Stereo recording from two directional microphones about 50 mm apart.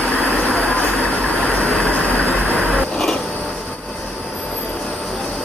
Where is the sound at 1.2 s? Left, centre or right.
Centre.